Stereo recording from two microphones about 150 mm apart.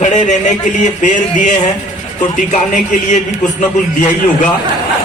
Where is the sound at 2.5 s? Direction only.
55° left (ahead or behind).